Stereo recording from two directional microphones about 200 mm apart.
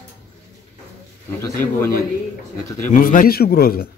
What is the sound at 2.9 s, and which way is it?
Speech, 40° left (ahead or behind).